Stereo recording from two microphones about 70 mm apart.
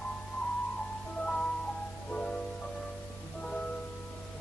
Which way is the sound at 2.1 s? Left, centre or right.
Centre.